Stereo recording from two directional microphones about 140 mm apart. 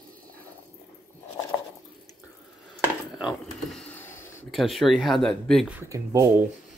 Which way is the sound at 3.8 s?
15° left (ahead or behind).